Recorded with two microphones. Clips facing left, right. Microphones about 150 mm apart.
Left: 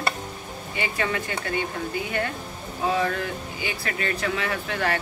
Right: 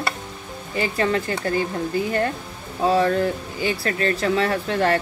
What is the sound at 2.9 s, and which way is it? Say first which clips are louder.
Speech: right 6 dB; 35° right (ahead or behind).